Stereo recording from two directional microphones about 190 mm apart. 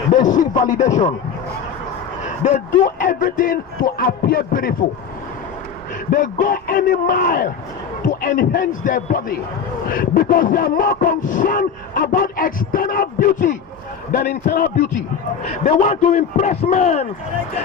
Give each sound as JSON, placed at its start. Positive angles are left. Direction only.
{"t": 0.1, "sound": "a man's voice", "side_deg": 45}
{"t": 2.4, "sound": "speech", "side_deg": 40}
{"t": 6.1, "sound": "speech", "side_deg": 45}
{"t": 15.6, "sound": "a man's voice", "side_deg": 40}